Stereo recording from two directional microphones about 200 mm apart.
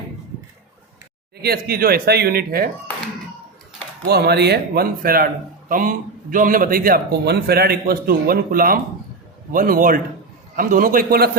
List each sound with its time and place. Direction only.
1.4 s a man's voice: 50° right (ahead or behind)
4.0 s a man's voice: 55° right (ahead or behind)